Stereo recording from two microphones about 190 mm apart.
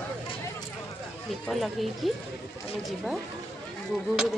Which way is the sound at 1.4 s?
Centre (ahead or behind).